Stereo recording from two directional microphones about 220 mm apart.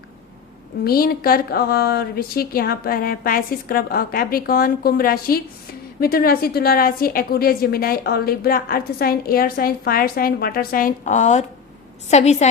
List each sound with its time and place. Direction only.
0.9 s a woman's voice: 40° left (ahead or behind)